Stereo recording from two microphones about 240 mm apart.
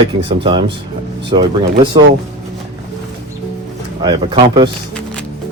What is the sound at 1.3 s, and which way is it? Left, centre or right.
Speech, right.